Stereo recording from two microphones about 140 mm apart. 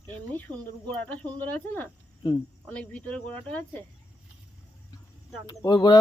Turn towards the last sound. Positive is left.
turn(degrees=30)  # may be behind; listen again after turning